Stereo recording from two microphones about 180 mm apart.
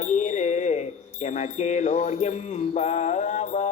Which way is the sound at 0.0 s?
45° left (ahead or behind).